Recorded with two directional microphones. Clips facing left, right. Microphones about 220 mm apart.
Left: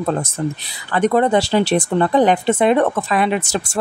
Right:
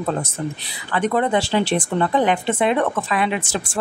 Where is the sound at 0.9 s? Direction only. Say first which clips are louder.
Left 4 dB; 40° left (ahead or behind).